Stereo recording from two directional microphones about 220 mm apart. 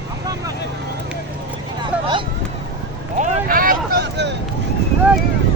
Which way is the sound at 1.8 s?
20° right (ahead or behind).